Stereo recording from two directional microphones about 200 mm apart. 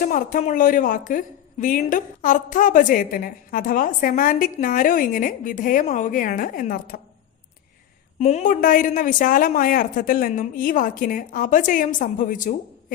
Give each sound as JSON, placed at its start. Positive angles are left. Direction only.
{"t": 0.0, "sound": "a woman's voice", "side_deg": 40}
{"t": 8.2, "sound": "a woman's voice", "side_deg": 35}